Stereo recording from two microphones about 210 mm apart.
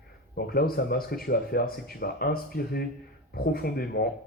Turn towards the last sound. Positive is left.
turn(degrees=50)  # may be behind; listen again after turning